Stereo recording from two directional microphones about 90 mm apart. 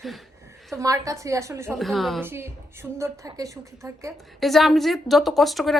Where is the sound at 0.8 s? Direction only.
40° right (ahead or behind).